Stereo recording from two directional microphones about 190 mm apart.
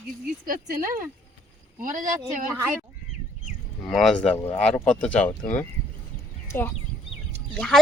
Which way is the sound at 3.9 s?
Centre (ahead or behind).